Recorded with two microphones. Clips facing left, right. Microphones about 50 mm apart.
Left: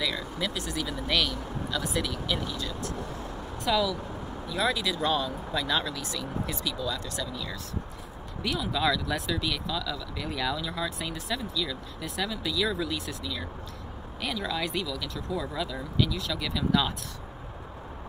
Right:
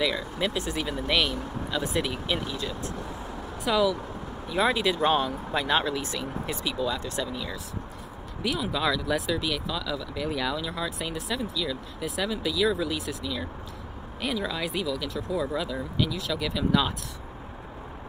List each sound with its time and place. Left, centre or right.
0.4 s speech: right
1.0 s speech: right
3.7 s speech: centre
4.5 s speech: right
8.4 s speech: centre